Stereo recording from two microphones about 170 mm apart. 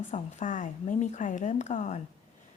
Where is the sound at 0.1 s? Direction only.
45° left (ahead or behind).